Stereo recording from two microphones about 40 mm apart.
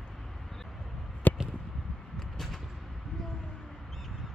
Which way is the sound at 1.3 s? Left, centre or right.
Left.